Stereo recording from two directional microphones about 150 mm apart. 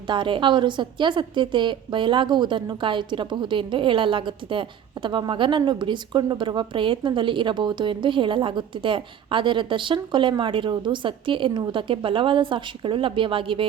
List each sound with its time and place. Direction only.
0.1 s a woman's voice: 35° right (ahead or behind)